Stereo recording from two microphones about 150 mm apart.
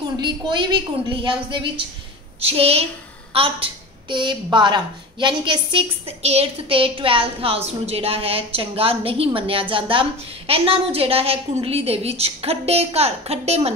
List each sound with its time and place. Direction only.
0.2 s a woman's voice: 30° right (ahead or behind)